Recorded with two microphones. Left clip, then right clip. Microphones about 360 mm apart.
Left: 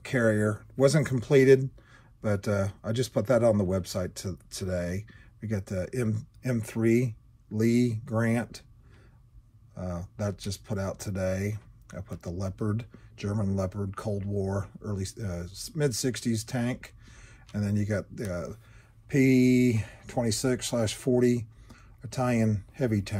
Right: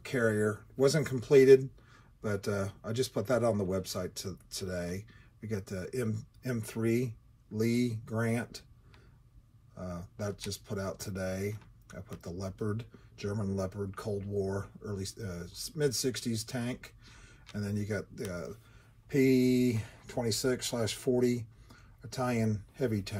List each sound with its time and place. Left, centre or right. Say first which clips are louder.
0.0 s speech: left 4 dB; left
9.8 s speech: left 5 dB; left